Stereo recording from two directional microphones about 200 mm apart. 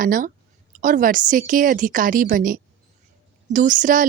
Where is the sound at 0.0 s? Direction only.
45° right (ahead or behind).